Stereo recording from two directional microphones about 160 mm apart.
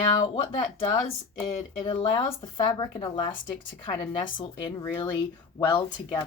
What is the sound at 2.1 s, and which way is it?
A woman's voice, 30° left (ahead or behind).